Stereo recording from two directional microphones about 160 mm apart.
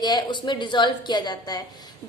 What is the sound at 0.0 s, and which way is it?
A woman's voice, 30° left (ahead or behind).